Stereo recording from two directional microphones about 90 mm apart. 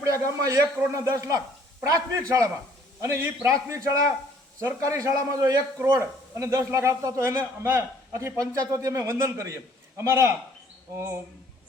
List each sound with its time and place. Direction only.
0.0 s a man's voice: 35° right (ahead or behind)